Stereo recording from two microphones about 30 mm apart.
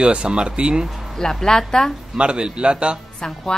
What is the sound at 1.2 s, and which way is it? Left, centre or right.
Speech, left.